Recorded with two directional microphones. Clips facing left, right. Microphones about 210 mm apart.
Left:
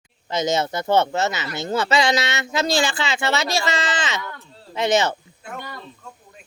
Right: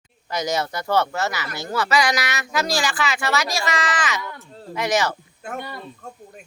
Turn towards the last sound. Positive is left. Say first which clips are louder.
# right 3 dB
turn(degrees=-50)  # may be behind; listen again after turning